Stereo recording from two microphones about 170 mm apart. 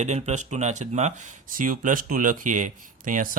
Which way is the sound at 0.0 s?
40° right (ahead or behind).